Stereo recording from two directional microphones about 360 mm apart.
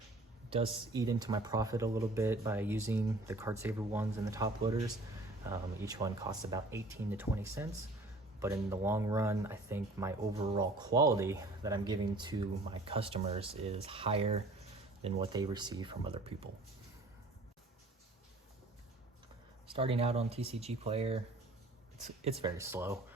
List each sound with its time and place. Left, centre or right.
0.7 s speech: centre
19.7 s speech: centre